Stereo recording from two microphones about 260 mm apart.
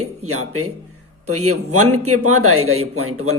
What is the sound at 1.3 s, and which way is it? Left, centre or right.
A man's voice, right.